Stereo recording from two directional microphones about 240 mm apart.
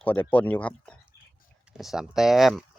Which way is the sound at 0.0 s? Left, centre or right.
Centre.